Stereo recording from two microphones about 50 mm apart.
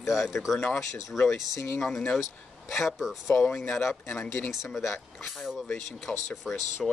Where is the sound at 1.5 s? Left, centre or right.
Left.